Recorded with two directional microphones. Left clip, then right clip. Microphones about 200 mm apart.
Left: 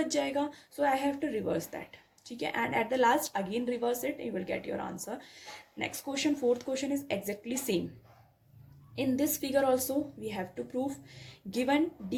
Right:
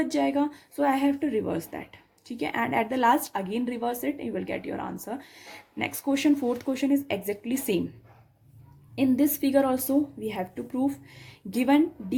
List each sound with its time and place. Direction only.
0.0 s speech: 25° right (ahead or behind)
9.0 s speech: 30° right (ahead or behind)